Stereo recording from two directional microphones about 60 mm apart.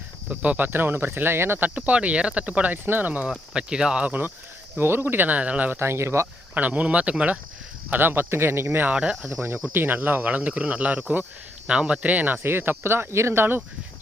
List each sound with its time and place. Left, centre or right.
0.3 s speech: right
1.7 s speech: right
3.2 s speech: centre
4.0 s speech: right
4.8 s speech: right
5.8 s speech: right
6.5 s speech: right
7.9 s speech: right
9.7 s speech: right
12.4 s speech: right